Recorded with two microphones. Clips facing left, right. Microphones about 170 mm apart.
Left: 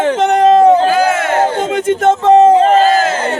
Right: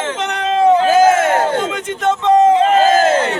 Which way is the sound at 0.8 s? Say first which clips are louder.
Right 2 dB; 45° right (ahead or behind).